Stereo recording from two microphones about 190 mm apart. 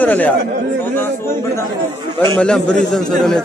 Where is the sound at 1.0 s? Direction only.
15° left (ahead or behind).